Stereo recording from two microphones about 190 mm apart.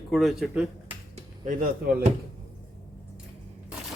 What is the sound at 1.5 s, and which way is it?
Speech, 40° right (ahead or behind).